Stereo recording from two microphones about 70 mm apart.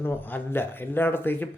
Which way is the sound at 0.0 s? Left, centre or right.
Left.